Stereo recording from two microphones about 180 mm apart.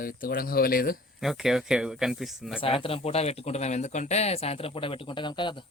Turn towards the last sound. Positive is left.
turn(degrees=25)  # may be behind; listen again after turning